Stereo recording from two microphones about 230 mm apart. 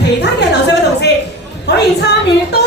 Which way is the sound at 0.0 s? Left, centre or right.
Left.